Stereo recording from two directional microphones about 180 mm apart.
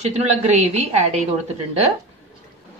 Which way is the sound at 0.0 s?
40° right (ahead or behind).